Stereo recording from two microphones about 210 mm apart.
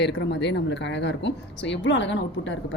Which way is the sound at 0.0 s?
55° left (ahead or behind).